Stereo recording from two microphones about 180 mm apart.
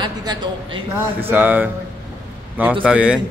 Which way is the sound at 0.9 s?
10° right (ahead or behind).